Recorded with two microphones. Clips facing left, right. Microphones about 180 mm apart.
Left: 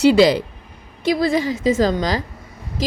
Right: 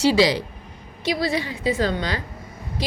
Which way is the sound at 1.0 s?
50° left (ahead or behind).